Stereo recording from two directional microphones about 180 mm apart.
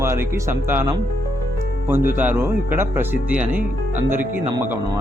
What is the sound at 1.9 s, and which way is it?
Speech, 10° right (ahead or behind).